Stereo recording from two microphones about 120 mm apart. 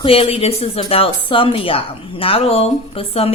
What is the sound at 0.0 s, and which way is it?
A woman's voice, 50° left (ahead or behind).